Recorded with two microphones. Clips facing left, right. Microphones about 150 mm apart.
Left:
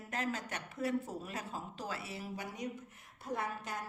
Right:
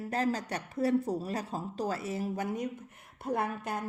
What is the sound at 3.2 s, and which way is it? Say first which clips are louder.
Speech: right 7 dB; 60° right (ahead or behind).